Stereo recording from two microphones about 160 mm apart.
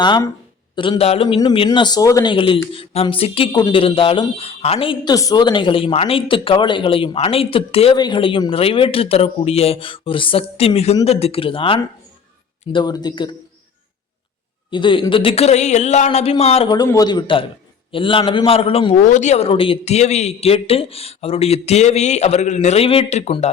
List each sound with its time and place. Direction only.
0.0 s speech: 30° left (ahead or behind)
2.3 s speech: 30° left (ahead or behind)
5.1 s speech: 25° left (ahead or behind)
14.7 s speech: 30° left (ahead or behind)
16.6 s speech: 25° left (ahead or behind)
19.0 s speech: 50° left (ahead or behind)